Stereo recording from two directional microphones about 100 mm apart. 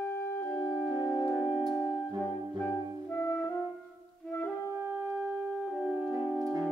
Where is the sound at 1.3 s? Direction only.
10° left (ahead or behind).